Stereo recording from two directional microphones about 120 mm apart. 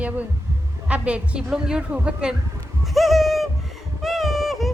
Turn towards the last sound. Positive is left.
turn(degrees=0)  # may be behind; listen again after turning